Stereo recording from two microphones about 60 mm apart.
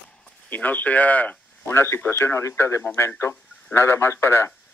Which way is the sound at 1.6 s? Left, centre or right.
Left.